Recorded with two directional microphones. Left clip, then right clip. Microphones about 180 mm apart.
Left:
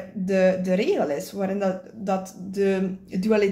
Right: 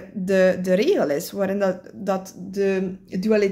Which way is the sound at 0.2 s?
45° right (ahead or behind).